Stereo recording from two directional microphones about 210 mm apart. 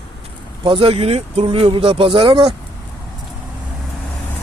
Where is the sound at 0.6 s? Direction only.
25° right (ahead or behind).